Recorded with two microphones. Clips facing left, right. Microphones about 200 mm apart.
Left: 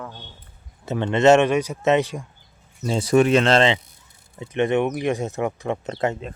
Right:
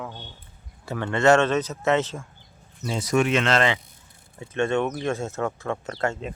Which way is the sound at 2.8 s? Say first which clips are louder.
Left 5 dB; 30° left (ahead or behind).